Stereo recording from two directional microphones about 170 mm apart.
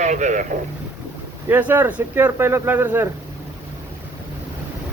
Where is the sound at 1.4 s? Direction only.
10° right (ahead or behind).